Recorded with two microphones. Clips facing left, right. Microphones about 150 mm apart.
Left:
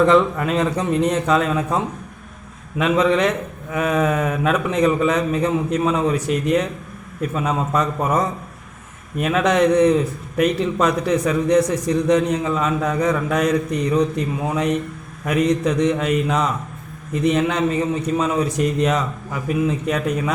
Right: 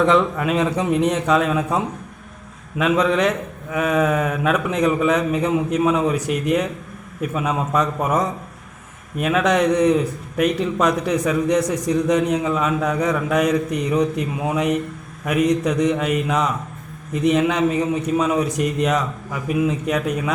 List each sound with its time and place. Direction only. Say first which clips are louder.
0.0 s a man's voice: left 2 dB; centre (ahead or behind)